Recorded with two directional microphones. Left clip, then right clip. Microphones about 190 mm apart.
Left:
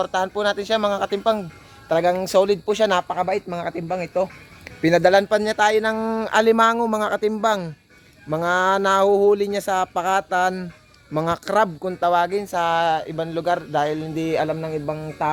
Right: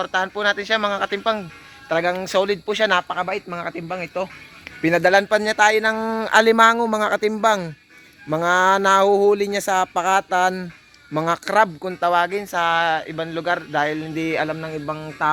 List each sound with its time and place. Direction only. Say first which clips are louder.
0.0 s speech: right 1 dB; centre (ahead or behind); by 10.7 s 25° right (ahead or behind)
11.1 s speech: right 1 dB; 10° right (ahead or behind)